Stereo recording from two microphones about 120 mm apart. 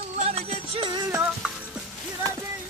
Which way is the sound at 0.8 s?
35° right (ahead or behind).